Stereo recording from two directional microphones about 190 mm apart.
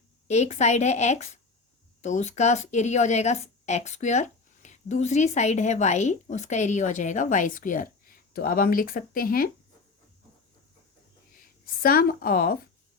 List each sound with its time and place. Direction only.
0.3 s a woman's voice: 35° left (ahead or behind)
11.6 s a woman's voice: 50° left (ahead or behind)